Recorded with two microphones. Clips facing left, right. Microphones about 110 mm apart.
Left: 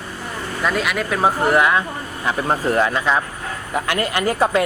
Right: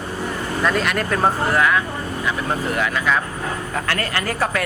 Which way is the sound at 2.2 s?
35° left (ahead or behind).